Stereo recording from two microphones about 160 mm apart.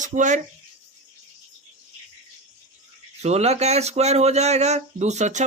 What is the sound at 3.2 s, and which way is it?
Speech, 40° right (ahead or behind).